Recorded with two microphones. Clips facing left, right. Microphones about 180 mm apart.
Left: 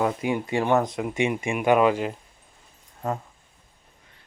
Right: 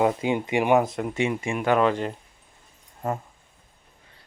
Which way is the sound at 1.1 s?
15° left (ahead or behind).